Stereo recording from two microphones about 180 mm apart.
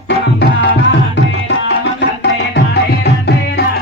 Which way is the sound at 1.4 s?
75° left (ahead or behind).